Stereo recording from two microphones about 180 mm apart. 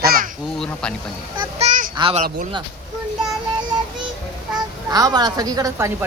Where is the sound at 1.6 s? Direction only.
40° right (ahead or behind).